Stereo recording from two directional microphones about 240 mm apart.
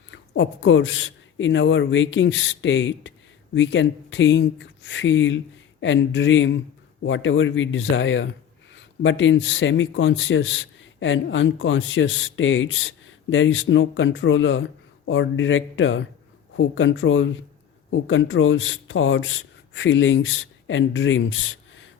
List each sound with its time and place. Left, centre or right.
0.1 s speech: left